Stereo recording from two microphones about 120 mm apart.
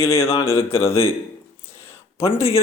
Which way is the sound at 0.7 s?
50° left (ahead or behind).